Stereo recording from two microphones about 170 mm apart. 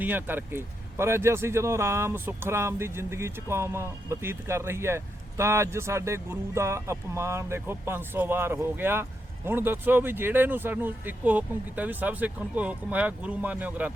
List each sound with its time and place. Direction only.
0.0 s speech: 10° right (ahead or behind)